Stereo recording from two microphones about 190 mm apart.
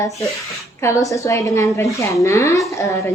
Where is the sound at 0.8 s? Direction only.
15° left (ahead or behind).